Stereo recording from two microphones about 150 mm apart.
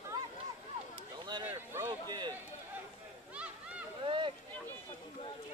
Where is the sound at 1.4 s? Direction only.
20° right (ahead or behind).